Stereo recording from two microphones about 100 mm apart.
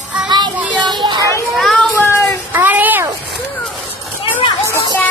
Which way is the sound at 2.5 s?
20° right (ahead or behind).